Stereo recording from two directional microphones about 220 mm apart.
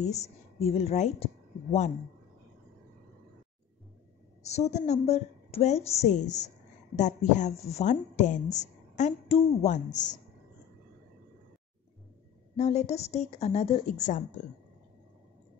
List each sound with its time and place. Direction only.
0.0 s a woman's voice: 30° left (ahead or behind)
4.4 s a woman's voice: 30° left (ahead or behind)
12.5 s a woman's voice: 30° left (ahead or behind)